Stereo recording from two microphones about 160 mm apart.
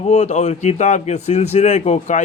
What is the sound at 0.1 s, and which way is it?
Speech, 45° left (ahead or behind).